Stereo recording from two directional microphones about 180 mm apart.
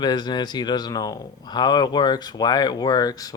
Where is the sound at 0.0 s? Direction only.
25° left (ahead or behind).